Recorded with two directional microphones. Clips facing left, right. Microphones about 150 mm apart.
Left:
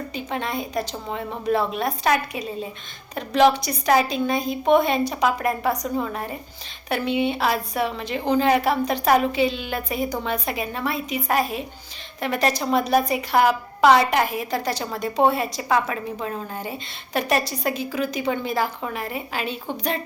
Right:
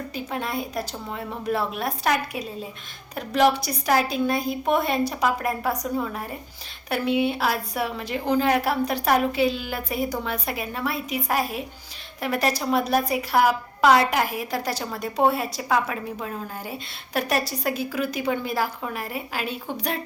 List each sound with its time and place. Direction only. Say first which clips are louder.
0.1 s a woman's voice: left 1 dB; 5° right (ahead or behind)